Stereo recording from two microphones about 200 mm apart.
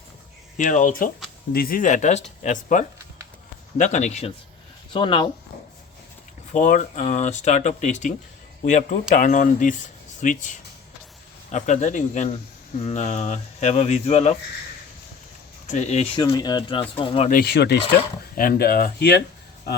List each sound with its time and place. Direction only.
0.5 s speech: 40° left (ahead or behind)
4.9 s speech: 25° left (ahead or behind)
6.5 s speech: 40° left (ahead or behind)
11.5 s speech: 35° left (ahead or behind)
15.6 s speech: 35° left (ahead or behind)
16.2 s speech: 15° left (ahead or behind)
17.2 s speech: 50° left (ahead or behind)